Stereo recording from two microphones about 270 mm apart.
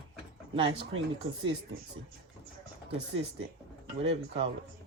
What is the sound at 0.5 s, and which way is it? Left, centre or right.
Speech, centre.